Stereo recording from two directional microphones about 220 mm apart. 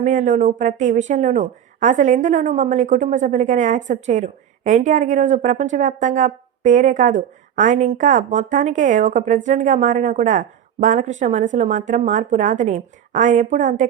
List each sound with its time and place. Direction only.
0.0 s a woman's voice: 35° right (ahead or behind)